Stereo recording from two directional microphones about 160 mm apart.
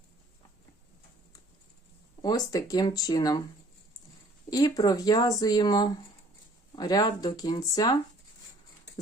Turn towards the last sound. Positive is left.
turn(degrees=25)  # may be behind; listen again after turning